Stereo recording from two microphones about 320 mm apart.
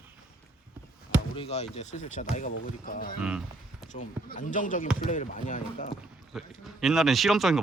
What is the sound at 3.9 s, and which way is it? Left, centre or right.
Speech, left.